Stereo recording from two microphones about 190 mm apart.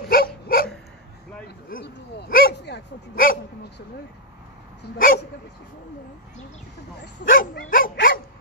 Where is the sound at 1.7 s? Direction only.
60° left (ahead or behind).